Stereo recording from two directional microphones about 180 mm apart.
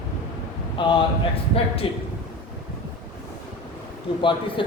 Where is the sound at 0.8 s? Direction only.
25° left (ahead or behind).